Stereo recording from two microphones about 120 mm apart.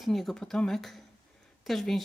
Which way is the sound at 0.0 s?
Centre (ahead or behind).